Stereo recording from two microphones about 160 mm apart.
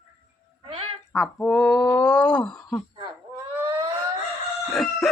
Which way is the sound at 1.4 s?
5° left (ahead or behind).